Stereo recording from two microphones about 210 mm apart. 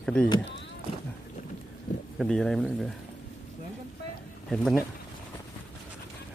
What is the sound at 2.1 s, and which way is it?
Speech, 5° left (ahead or behind).